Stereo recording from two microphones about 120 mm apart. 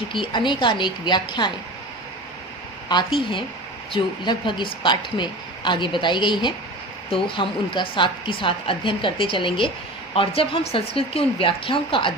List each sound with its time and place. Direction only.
0.1 s a woman's voice: 40° left (ahead or behind)
2.9 s a woman's voice: 45° left (ahead or behind)